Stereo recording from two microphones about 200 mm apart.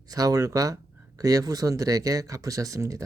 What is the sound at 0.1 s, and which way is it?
Speech, 15° right (ahead or behind).